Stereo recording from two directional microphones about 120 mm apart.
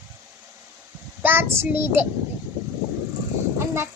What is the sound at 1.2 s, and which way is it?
Child singing, 20° right (ahead or behind).